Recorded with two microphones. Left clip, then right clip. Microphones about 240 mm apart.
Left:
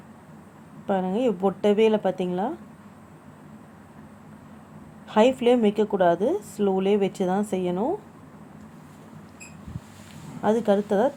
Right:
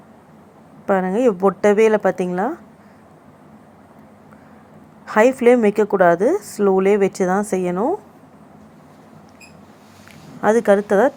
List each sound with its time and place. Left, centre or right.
0.9 s a woman's voice: centre
5.0 s a sound: centre
5.4 s speech: centre
10.4 s speech: centre